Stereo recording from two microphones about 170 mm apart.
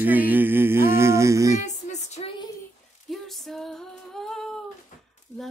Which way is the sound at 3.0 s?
Centre (ahead or behind).